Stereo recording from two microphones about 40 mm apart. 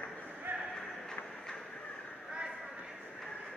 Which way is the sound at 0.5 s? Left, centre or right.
Right.